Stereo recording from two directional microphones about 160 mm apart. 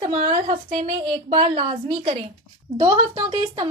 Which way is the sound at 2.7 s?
30° right (ahead or behind).